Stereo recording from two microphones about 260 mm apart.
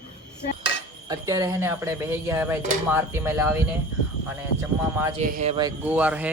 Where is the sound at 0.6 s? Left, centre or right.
Centre.